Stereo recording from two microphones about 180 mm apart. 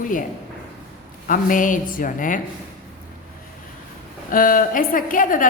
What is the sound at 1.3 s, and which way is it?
A woman's voice, 50° left (ahead or behind).